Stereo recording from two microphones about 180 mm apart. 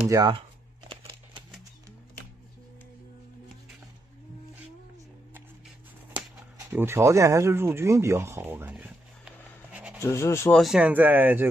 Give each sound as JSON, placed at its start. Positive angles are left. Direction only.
{"t": 0.1, "sound": "speech", "side_deg": -20}
{"t": 0.8, "sound": "a sound", "side_deg": -25}
{"t": 6.7, "sound": "speech", "side_deg": -10}
{"t": 10.0, "sound": "speech", "side_deg": 15}
{"t": 10.6, "sound": "speech", "side_deg": -5}